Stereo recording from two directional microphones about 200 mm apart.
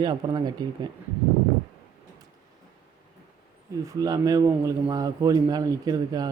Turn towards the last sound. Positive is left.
turn(degrees=-20)  # may be behind; listen again after turning